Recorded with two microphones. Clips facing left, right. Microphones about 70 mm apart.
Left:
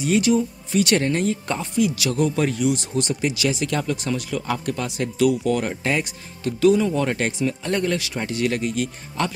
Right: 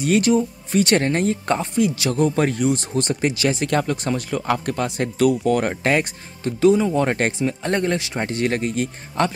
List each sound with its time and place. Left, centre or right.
0.0 s speech: right
6.4 s speech: right